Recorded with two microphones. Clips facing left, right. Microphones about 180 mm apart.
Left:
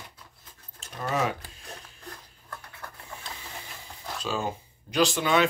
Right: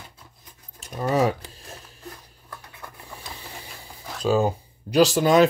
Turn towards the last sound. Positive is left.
turn(degrees=-40)  # may be behind; listen again after turning